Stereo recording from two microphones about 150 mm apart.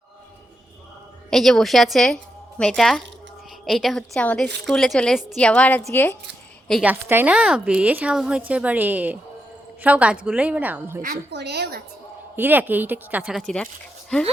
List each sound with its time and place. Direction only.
1.3 s a woman's voice: centre (ahead or behind)
6.8 s a woman's voice: 10° right (ahead or behind)
11.0 s a woman's voice: 90° right
12.4 s a woman's voice: 10° right (ahead or behind); by 14.3 s 5° left (ahead or behind)